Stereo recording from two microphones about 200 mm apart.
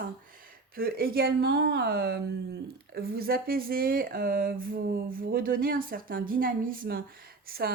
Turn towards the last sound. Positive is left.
turn(degrees=-50)  # may be behind; listen again after turning